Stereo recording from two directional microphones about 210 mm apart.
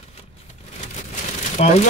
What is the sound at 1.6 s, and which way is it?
Speech, 30° left (ahead or behind).